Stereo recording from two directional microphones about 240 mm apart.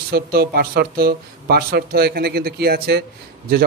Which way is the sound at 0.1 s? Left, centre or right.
Right.